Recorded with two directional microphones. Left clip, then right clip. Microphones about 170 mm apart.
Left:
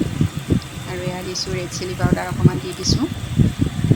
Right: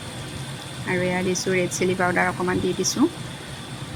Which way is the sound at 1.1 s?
10° right (ahead or behind).